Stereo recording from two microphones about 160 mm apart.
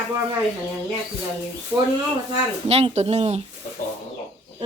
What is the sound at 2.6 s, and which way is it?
Speech, 40° right (ahead or behind).